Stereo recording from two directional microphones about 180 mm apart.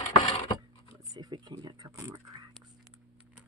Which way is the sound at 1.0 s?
20° right (ahead or behind).